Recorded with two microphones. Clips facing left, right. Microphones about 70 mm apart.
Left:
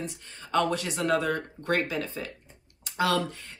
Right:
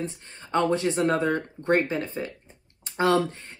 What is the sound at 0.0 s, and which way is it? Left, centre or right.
Speech, right.